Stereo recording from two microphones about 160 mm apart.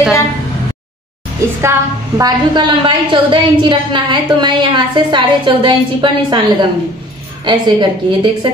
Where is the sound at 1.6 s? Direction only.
20° right (ahead or behind).